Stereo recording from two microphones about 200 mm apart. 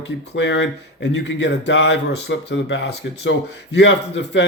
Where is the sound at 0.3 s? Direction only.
65° left (ahead or behind).